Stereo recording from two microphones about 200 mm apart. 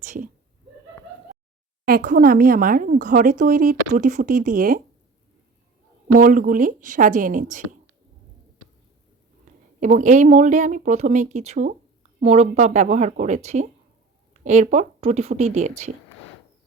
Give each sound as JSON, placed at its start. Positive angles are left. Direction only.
{"t": 0.0, "sound": "speech", "side_deg": -40}
{"t": 1.9, "sound": "speech", "side_deg": -45}
{"t": 6.1, "sound": "speech", "side_deg": -40}
{"t": 9.5, "sound": "a sound", "side_deg": -35}
{"t": 9.8, "sound": "speech", "side_deg": -40}